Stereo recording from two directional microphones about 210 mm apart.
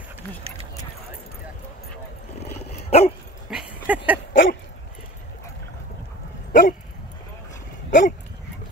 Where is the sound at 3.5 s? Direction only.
5° right (ahead or behind).